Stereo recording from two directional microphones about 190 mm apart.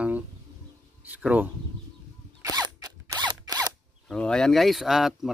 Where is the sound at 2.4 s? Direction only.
15° right (ahead or behind).